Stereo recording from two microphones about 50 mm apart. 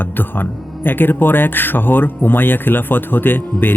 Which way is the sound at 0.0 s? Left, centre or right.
Left.